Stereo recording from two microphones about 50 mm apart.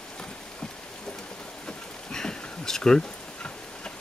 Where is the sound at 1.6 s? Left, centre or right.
Centre.